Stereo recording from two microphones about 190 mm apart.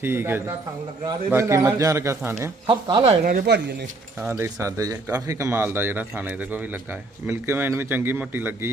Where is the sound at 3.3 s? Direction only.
55° right (ahead or behind).